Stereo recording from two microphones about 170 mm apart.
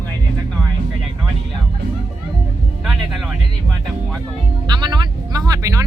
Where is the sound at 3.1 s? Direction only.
Centre (ahead or behind).